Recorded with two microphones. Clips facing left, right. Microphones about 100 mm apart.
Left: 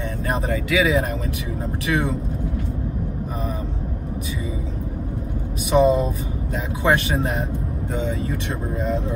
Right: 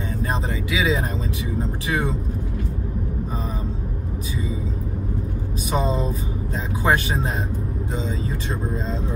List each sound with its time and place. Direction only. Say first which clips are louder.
0.3 s speech: left 6 dB; 25° right (ahead or behind)
5.7 s speech: left 7 dB; 30° right (ahead or behind)